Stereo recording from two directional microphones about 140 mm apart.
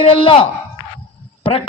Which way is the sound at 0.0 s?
40° left (ahead or behind).